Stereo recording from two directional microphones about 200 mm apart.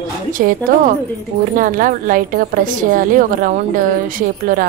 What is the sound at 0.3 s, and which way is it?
A woman's voice, 45° right (ahead or behind).